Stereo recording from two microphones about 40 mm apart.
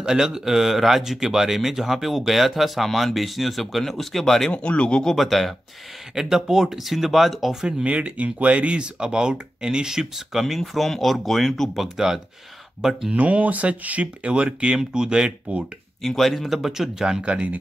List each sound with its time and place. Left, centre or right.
0.0 s speech: centre
4.5 s speech: left
5.1 s speech: centre
6.1 s speech: centre
7.6 s speech: right; by 10.4 s centre
10.4 s speech: centre
11.8 s speech: centre
13.1 s speech: right
16.0 s speech: centre
17.2 s speech: right